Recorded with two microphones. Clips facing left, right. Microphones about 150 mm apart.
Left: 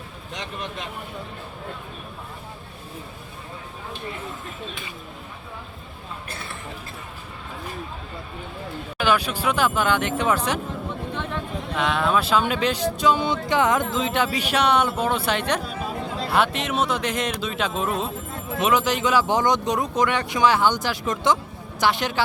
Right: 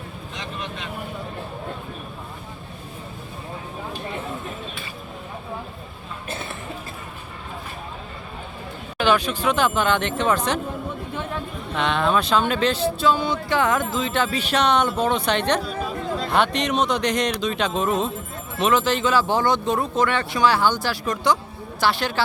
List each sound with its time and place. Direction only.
6.2 s a sound: 20° right (ahead or behind)
9.0 s speech: 10° left (ahead or behind)
11.8 s speech: 5° left (ahead or behind)